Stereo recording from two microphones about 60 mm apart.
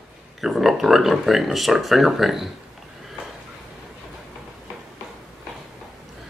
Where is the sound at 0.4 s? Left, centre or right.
Centre.